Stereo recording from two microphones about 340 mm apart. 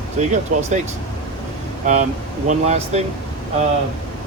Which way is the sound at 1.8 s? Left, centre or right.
Right.